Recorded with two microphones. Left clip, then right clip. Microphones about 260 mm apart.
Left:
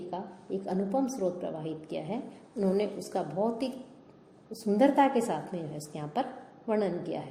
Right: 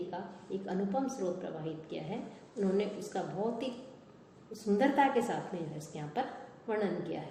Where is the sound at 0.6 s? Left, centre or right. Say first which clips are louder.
Left 4 dB; left.